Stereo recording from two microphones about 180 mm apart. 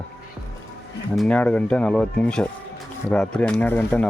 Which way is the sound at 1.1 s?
5° left (ahead or behind).